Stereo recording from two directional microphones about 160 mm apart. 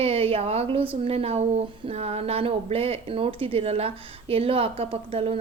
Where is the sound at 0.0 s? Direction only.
40° right (ahead or behind).